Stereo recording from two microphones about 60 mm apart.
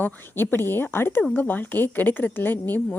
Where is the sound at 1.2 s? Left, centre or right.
Left.